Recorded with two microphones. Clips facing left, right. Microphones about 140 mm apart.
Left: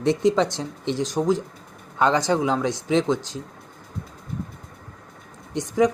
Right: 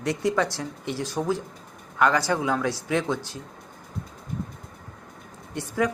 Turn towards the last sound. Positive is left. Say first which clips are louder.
# left 6 dB
turn(degrees=20)  # may be behind; listen again after turning